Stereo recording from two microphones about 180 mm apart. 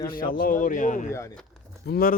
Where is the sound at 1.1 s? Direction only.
15° left (ahead or behind).